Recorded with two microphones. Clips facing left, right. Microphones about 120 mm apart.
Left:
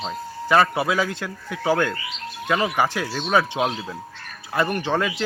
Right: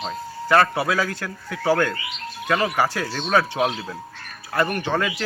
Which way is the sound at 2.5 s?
5° left (ahead or behind).